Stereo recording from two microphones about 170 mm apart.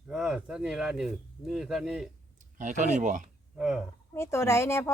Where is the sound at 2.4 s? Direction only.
45° right (ahead or behind).